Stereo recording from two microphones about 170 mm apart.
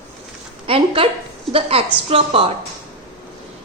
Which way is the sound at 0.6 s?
35° right (ahead or behind).